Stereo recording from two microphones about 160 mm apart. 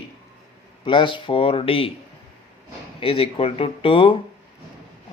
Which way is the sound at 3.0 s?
35° left (ahead or behind).